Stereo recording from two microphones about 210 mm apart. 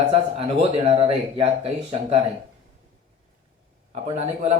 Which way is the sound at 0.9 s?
25° right (ahead or behind).